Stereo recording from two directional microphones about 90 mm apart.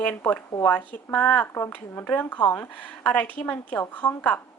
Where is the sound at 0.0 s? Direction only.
20° left (ahead or behind).